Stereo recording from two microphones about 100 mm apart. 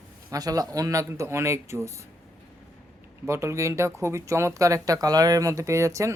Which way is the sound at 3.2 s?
30° right (ahead or behind).